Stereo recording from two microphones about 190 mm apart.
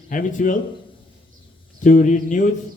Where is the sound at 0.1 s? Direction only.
45° left (ahead or behind).